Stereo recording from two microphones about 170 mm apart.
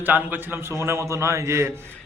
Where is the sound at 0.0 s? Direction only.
10° right (ahead or behind).